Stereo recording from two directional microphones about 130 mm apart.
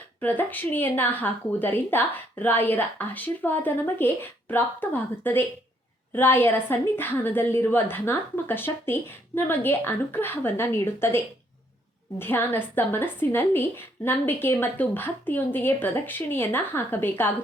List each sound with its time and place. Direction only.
0.2 s a woman's voice: 15° left (ahead or behind)
12.2 s a woman's voice: 15° left (ahead or behind)